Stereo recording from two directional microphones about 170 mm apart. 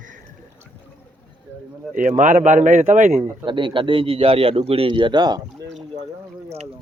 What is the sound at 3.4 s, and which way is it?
A man's voice, 30° right (ahead or behind).